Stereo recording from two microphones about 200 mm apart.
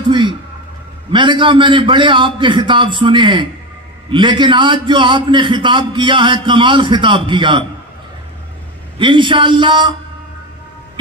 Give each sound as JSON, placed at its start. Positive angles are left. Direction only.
{"t": 0.1, "sound": "a man's voice", "side_deg": -25}
{"t": 8.9, "sound": "a man's voice", "side_deg": -25}